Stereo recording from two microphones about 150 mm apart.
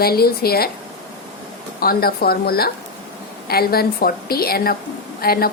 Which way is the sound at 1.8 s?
85° left.